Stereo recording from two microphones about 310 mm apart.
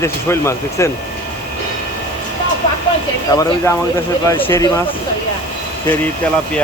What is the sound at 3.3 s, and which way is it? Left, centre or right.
Speech, centre.